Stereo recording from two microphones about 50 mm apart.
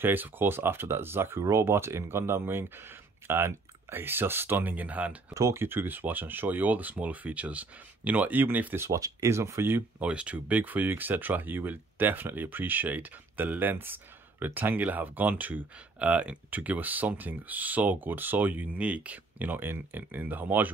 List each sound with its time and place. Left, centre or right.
0.0 s speech: right
5.3 s speech: right
5.6 s speech: right
8.7 s speech: right
9.9 s speech: right